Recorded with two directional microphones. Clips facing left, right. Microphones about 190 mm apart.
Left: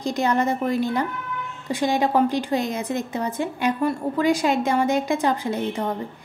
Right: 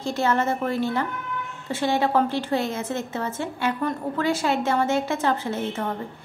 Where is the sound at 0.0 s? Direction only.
15° left (ahead or behind).